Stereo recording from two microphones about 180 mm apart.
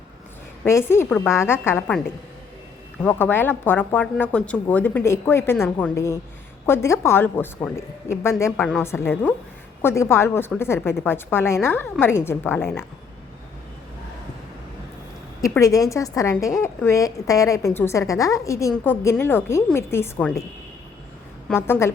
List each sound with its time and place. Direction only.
0.6 s a woman's voice: 15° left (ahead or behind)
5.9 s a woman's voice: 15° left (ahead or behind)
15.4 s a woman's voice: 20° left (ahead or behind)
21.5 s a woman's voice: 15° left (ahead or behind)